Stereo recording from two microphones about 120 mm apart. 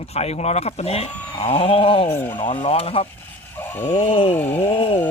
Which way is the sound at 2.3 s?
90° left.